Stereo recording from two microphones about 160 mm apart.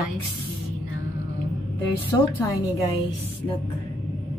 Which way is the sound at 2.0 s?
20° left (ahead or behind).